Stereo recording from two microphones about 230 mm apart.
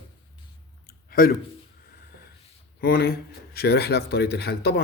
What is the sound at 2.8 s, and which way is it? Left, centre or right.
Speech, left.